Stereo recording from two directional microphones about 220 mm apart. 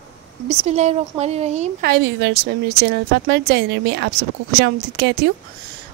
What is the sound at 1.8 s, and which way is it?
A woman's voice, 50° right (ahead or behind).